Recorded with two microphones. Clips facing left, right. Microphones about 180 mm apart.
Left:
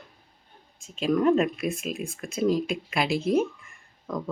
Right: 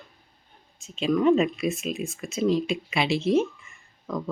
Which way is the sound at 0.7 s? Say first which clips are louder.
Right 1 dB; 45° left (ahead or behind).